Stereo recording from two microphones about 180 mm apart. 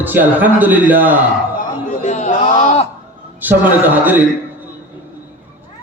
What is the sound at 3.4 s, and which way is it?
Speech, 10° right (ahead or behind).